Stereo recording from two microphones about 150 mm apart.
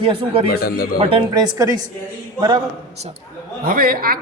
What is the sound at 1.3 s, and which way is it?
Speech, 25° right (ahead or behind).